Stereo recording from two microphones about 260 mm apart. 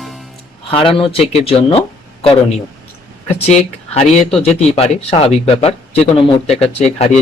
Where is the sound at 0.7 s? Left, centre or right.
Centre.